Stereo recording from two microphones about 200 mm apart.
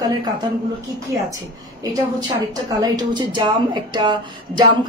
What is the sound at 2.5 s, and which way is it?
Speech, 20° right (ahead or behind).